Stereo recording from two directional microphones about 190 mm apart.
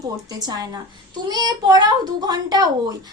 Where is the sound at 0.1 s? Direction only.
20° right (ahead or behind).